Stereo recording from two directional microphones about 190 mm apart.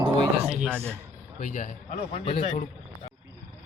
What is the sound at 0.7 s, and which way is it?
Speech, 5° left (ahead or behind).